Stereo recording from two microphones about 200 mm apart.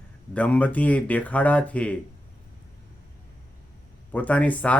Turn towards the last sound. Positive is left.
turn(degrees=5)  # may be behind; listen again after turning